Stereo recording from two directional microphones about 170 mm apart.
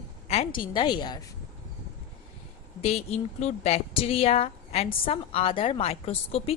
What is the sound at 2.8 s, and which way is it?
A woman's voice, 35° left (ahead or behind).